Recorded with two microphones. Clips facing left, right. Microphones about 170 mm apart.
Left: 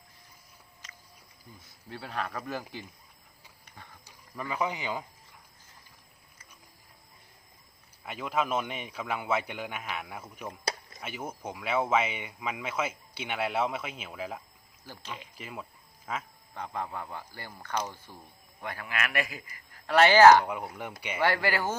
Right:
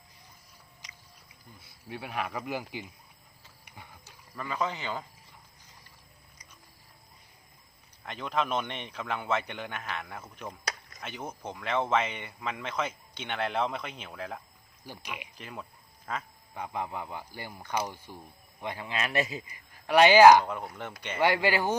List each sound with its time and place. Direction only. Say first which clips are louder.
0.8 s a sound: left 1 dB; 15° right (ahead or behind)
1.6 s speech: right 2 dB; 15° right (ahead or behind)
3.7 s horse: right 1 dB; 10° right (ahead or behind)
4.0 s speech: left 1 dB; 15° left (ahead or behind)
8.0 s speech: even; 5° left (ahead or behind)
14.8 s speech: right 1 dB; 15° right (ahead or behind)
15.4 s speech: left 1 dB; 5° left (ahead or behind)
16.6 s a man's voice: right 1 dB; 15° right (ahead or behind)
20.4 s speech: left 1 dB; 10° left (ahead or behind)
21.2 s speech: right 2 dB; 15° right (ahead or behind)